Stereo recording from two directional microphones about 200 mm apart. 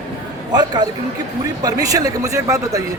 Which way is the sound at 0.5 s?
20° right (ahead or behind).